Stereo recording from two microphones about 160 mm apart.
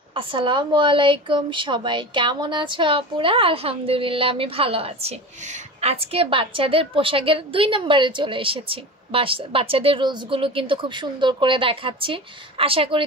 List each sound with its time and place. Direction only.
0.1 s a woman's voice: 30° right (ahead or behind)